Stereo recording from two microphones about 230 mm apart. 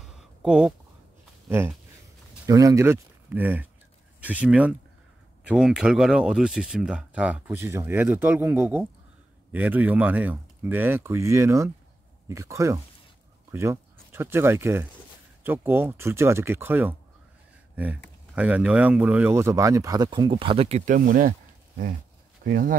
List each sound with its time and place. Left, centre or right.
0.0 s a sound: centre
1.5 s speech: centre
18.3 s speech: centre; by 22.8 s right